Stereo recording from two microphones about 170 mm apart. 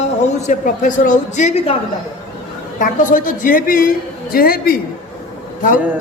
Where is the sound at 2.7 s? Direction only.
50° left (ahead or behind).